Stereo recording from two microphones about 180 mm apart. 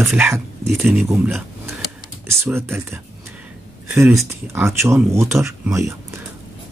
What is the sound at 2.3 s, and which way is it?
Speech, 15° right (ahead or behind).